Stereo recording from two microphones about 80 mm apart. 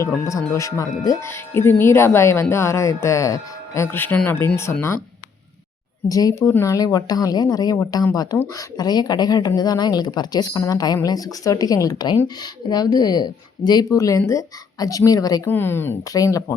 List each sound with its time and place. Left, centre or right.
0.3 s speech: left
3.8 s speech: left
6.1 s a woman's voice: left
15.4 s speech: left
16.1 s a woman's voice: left